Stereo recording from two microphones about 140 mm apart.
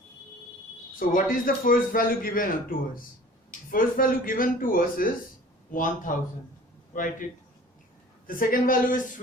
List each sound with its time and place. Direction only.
0.9 s a man's voice: 80° left
5.7 s a man's voice: 75° left (ahead or behind)
8.4 s a man's voice: 85° left